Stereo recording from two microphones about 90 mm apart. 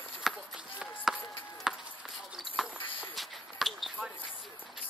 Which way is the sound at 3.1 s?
Centre (ahead or behind).